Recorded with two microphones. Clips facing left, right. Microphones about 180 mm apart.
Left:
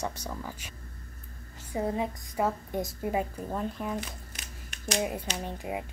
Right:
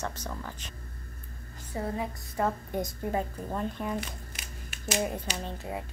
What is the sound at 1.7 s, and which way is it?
Speech, 20° left (ahead or behind).